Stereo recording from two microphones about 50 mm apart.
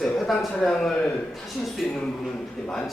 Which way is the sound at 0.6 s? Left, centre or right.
Centre.